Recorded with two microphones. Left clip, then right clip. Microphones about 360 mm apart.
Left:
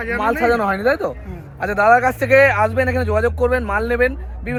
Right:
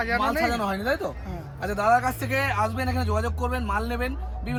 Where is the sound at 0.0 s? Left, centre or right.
Centre.